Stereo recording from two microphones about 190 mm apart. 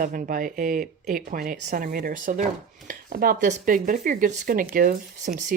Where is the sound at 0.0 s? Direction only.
45° right (ahead or behind).